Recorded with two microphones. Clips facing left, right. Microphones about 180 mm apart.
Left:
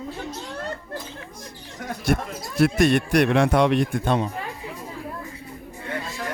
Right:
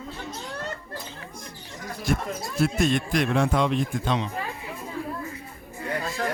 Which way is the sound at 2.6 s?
65° left (ahead or behind).